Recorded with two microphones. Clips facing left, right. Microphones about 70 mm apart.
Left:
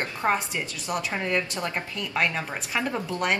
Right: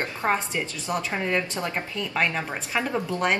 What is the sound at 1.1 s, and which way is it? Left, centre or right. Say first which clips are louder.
Speech: right 1 dB; centre.